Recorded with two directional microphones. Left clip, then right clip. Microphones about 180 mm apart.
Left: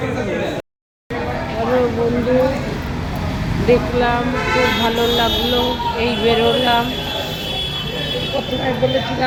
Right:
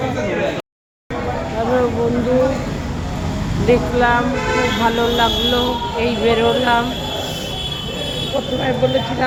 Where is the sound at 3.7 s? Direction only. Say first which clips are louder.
Right 1 dB; centre (ahead or behind).